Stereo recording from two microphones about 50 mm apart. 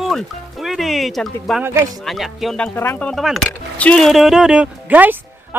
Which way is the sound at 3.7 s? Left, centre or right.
Left.